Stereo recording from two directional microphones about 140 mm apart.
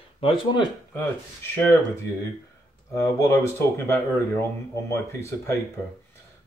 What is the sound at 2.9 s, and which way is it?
Speech, 20° left (ahead or behind).